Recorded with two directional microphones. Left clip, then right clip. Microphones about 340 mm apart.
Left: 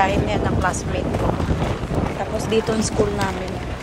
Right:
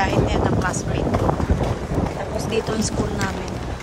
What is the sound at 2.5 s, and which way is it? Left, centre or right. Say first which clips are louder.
Speech: left 3 dB; centre.